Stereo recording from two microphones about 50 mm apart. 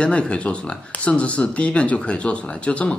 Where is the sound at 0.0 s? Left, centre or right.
Left.